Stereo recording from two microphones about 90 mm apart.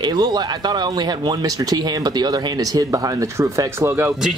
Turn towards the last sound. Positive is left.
turn(degrees=-25)  # may be behind; listen again after turning